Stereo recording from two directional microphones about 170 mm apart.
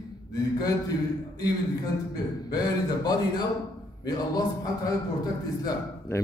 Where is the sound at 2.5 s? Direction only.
25° left (ahead or behind).